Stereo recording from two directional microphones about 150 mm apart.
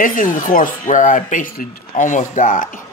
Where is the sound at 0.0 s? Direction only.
65° left (ahead or behind).